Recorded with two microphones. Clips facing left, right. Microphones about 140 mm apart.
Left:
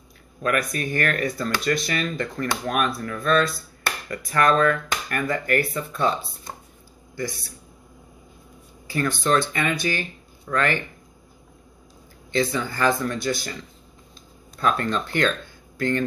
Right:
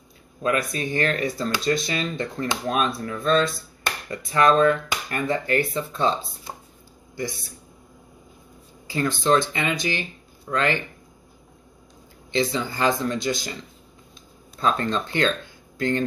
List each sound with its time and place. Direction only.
0.4 s speech: 25° right (ahead or behind)
8.8 s speech: 20° right (ahead or behind)
12.3 s speech: 20° right (ahead or behind)
14.6 s speech: 25° right (ahead or behind)